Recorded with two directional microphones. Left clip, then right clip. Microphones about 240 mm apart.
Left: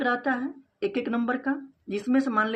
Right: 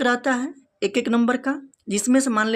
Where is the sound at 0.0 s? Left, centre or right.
Right.